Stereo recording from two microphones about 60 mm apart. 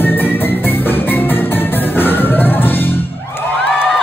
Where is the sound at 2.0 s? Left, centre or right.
Left.